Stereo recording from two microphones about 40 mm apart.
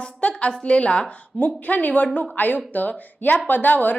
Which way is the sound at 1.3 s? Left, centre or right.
Left.